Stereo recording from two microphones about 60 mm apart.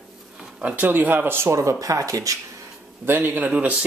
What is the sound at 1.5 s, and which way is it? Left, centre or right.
Speech, right.